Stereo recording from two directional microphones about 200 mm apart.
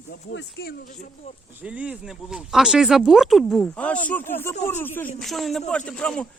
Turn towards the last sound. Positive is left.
turn(degrees=5)  # may be behind; listen again after turning